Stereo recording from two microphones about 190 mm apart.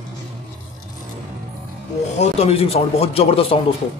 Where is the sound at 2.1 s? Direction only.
35° left (ahead or behind).